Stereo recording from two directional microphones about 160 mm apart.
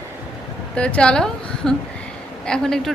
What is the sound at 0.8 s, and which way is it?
A woman's voice, 5° left (ahead or behind).